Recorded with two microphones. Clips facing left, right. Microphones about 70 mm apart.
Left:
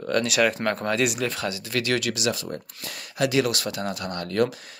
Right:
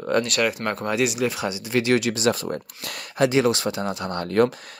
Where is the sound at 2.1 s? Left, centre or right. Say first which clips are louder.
Right 5 dB; right.